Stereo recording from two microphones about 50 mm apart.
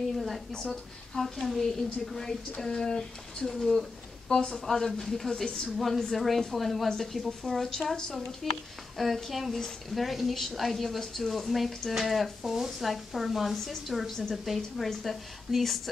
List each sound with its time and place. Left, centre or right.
0.1 s a sound: centre
0.5 s a woman's voice: centre
4.3 s a woman's voice: centre
5.7 s a woman's voice: centre